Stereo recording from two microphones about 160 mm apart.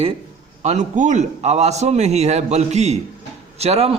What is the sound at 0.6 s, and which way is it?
A man's voice, 45° right (ahead or behind).